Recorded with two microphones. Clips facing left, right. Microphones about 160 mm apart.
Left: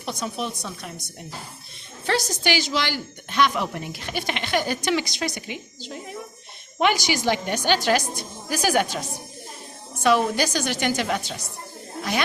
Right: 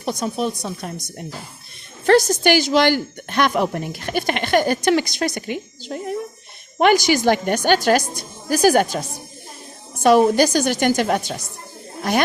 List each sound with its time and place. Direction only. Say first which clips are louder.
0.0 s speech: right 6 dB; 40° right (ahead or behind)
2.0 s a woman's voice: right 9 dB; 50° right (ahead or behind)